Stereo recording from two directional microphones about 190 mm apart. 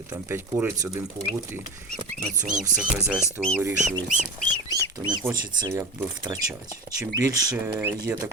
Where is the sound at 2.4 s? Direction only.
40° right (ahead or behind).